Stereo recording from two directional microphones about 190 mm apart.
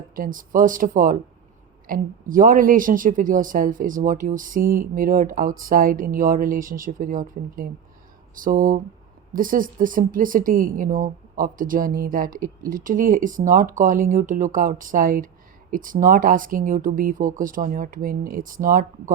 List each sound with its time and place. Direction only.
0.2 s a woman's voice: 45° right (ahead or behind)